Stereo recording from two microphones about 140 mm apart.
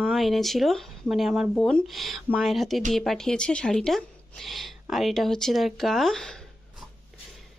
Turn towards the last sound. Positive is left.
turn(degrees=5)  # may be behind; listen again after turning